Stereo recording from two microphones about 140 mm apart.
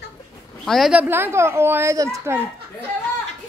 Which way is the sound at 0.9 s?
15° right (ahead or behind).